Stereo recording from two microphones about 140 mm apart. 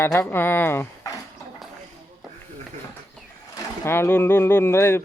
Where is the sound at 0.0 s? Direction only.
15° left (ahead or behind).